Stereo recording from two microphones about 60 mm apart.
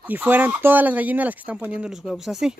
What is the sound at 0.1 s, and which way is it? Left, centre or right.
Speech, right.